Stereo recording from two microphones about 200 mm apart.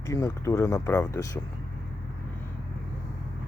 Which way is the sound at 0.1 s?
15° left (ahead or behind).